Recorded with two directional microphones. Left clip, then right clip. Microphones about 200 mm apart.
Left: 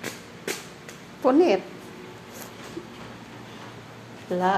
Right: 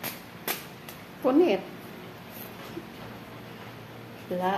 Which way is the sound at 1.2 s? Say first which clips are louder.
Left 3 dB; 20° left (ahead or behind).